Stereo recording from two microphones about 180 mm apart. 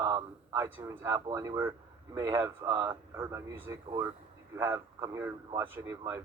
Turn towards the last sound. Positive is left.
turn(degrees=-15)  # may be behind; listen again after turning